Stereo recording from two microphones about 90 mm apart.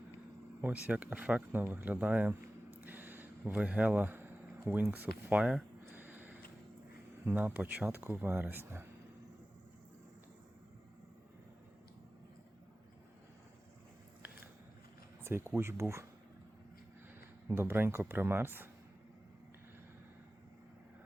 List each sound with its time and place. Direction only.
0.6 s speech: 20° right (ahead or behind)
2.6 s a sound: 20° right (ahead or behind)
7.3 s speech: 20° right (ahead or behind)
15.2 s speech: 30° right (ahead or behind)
17.5 s speech: 25° right (ahead or behind)